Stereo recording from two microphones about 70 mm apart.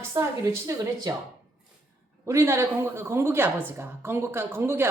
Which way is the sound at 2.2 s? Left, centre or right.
Right.